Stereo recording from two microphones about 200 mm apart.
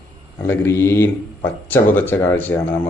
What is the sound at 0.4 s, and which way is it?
Speech, 10° left (ahead or behind).